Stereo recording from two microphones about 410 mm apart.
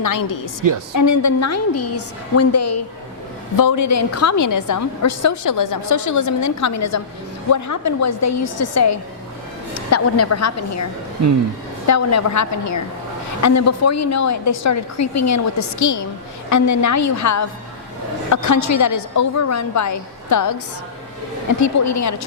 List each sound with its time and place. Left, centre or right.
0.0 s a woman's voice: left
11.9 s a woman's voice: left
21.6 s a woman's voice: left